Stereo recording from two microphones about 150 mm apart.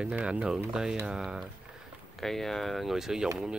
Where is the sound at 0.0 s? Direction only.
5° right (ahead or behind).